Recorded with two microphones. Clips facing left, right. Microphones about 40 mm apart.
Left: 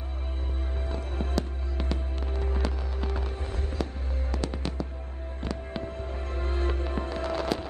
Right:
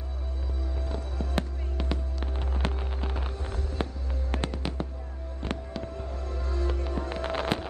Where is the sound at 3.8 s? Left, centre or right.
Right.